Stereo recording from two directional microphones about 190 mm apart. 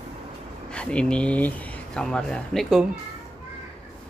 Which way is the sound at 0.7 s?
5° left (ahead or behind).